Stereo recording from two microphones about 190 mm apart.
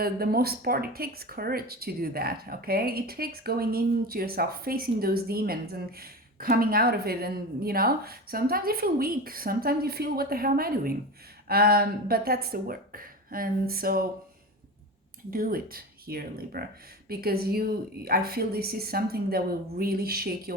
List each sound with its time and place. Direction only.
0.0 s speech: 50° right (ahead or behind)
15.3 s speech: 50° right (ahead or behind)